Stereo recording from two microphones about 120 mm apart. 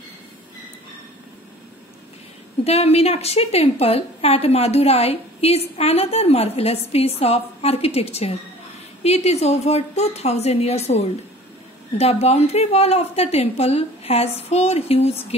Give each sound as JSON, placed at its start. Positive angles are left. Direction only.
{"t": 2.6, "sound": "a woman's voice", "side_deg": 60}